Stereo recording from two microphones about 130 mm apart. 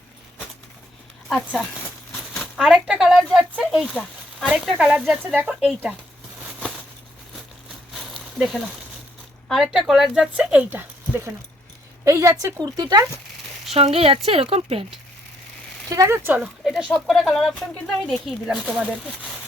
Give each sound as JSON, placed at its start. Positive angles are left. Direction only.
{"t": 1.3, "sound": "speech", "side_deg": 5}
{"t": 5.5, "sound": "speech", "side_deg": -5}
{"t": 7.9, "sound": "a sound", "side_deg": 0}
{"t": 9.5, "sound": "speech", "side_deg": 0}
{"t": 13.7, "sound": "speech", "side_deg": -50}
{"t": 15.9, "sound": "speech", "side_deg": -25}
{"t": 16.4, "sound": "speech", "side_deg": 0}